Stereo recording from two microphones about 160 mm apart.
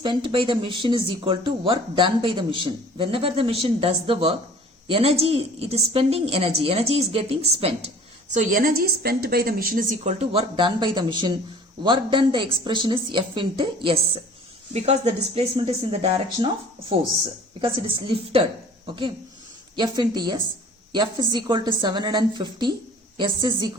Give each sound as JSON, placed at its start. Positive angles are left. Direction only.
{"t": 0.0, "sound": "speech", "side_deg": -30}
{"t": 8.3, "sound": "a woman's voice", "side_deg": -55}
{"t": 14.7, "sound": "speech", "side_deg": -45}
{"t": 17.6, "sound": "speech", "side_deg": -35}
{"t": 19.7, "sound": "a woman's voice", "side_deg": -25}